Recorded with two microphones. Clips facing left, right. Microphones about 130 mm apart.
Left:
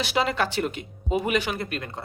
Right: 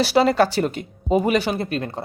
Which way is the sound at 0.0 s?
35° right (ahead or behind).